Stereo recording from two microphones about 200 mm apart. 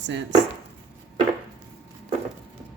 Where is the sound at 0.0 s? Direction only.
60° right (ahead or behind).